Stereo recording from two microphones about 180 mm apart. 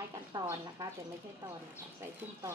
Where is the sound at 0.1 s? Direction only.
20° right (ahead or behind).